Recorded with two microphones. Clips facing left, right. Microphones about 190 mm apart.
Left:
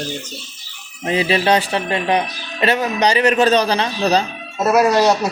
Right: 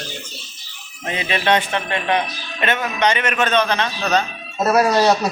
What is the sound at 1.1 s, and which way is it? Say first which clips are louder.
Speech: left 4 dB; 35° left (ahead or behind).